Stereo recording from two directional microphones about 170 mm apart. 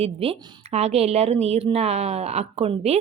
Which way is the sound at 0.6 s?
40° right (ahead or behind).